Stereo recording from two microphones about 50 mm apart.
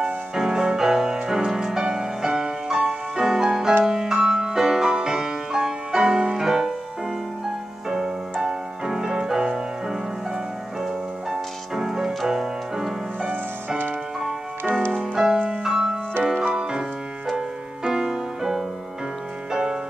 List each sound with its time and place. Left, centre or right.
0.0 s music: centre
7.9 s music: centre
13.2 s music: right
15.1 s music: centre